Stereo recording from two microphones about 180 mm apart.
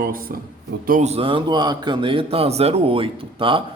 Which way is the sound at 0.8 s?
45° right (ahead or behind).